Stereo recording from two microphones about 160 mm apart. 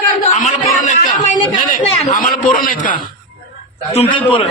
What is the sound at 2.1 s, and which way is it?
Speech, 60° left (ahead or behind).